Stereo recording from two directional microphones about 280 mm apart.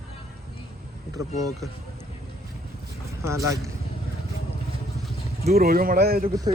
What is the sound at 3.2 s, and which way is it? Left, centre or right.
Speech, centre.